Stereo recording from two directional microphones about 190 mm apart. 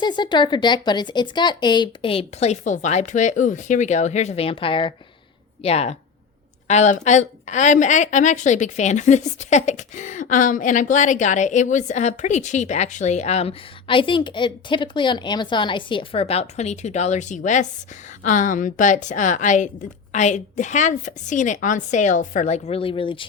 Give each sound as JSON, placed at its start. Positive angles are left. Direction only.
{"t": 0.0, "sound": "a woman's voice", "side_deg": 25}